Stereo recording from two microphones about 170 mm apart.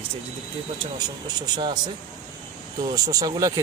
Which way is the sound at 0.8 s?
25° right (ahead or behind).